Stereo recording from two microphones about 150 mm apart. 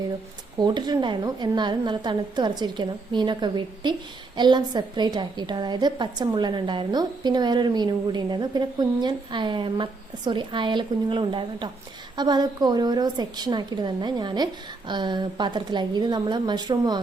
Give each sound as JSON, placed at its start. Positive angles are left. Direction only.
{"t": 0.6, "sound": "a woman's voice", "side_deg": -30}